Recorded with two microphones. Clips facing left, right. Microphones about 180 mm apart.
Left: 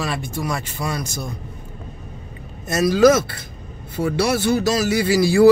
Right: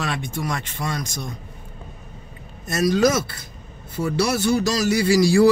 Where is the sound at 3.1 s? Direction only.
55° left (ahead or behind).